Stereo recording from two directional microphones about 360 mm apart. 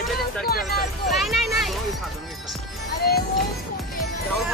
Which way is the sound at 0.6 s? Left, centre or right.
Centre.